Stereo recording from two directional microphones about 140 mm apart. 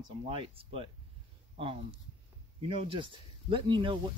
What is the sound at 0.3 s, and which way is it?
Speech, 40° right (ahead or behind).